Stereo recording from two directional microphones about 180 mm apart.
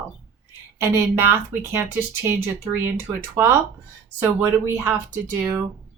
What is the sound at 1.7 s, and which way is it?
A woman's voice, 15° right (ahead or behind).